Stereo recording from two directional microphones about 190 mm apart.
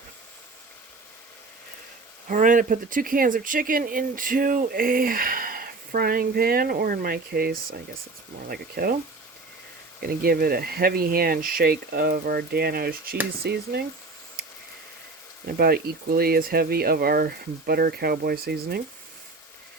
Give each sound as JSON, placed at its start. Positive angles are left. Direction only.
{"t": 2.2, "sound": "speech", "side_deg": -45}
{"t": 10.0, "sound": "speech", "side_deg": -50}
{"t": 15.4, "sound": "speech", "side_deg": -55}